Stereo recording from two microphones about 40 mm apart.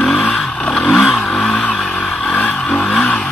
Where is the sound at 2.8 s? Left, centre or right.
Centre.